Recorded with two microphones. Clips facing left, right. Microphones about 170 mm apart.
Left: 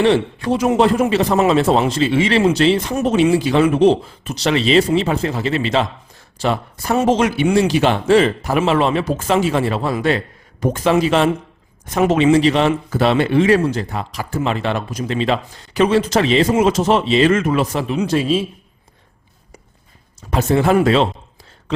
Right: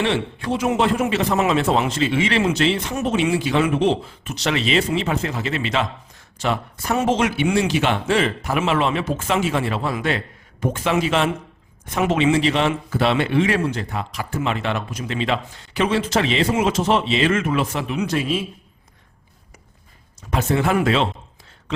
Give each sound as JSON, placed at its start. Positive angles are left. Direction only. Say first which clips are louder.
{"t": 0.0, "sound": "a man's voice", "louder": "left 7 dB", "side_deg": 40}
{"t": 20.3, "sound": "a man's voice", "louder": "left 5 dB", "side_deg": 35}